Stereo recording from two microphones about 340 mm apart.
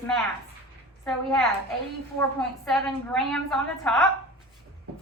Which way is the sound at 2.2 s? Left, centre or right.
Centre.